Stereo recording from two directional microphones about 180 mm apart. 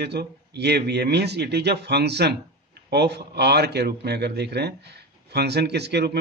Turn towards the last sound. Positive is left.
turn(degrees=-65)  # may be behind; listen again after turning